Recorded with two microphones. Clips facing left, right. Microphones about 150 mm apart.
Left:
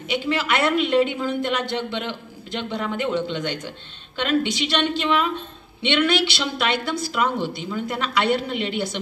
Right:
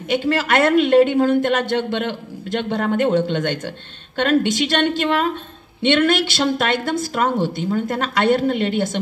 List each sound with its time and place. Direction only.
0.1 s a woman's voice: 50° right (ahead or behind)